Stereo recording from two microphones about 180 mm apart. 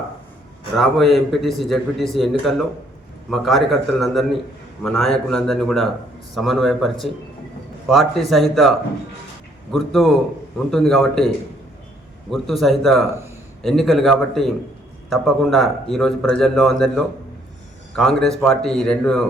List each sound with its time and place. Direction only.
0.8 s a man's voice: centre (ahead or behind)
9.7 s a man's voice: centre (ahead or behind)
12.3 s a man's voice: centre (ahead or behind)